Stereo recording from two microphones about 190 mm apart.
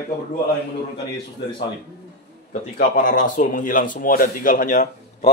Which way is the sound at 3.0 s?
45° left (ahead or behind).